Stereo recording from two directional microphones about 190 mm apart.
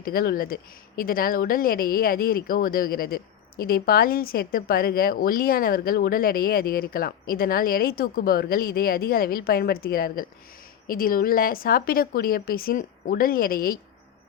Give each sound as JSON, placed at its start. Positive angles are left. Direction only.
{"t": 0.0, "sound": "a woman's voice", "side_deg": 50}